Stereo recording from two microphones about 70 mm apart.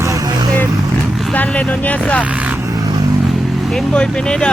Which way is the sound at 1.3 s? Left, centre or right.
Left.